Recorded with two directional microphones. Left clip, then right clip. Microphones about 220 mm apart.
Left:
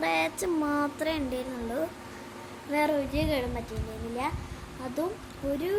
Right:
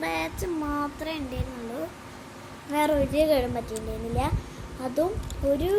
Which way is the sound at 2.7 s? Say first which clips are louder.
Right 4 dB; centre (ahead or behind).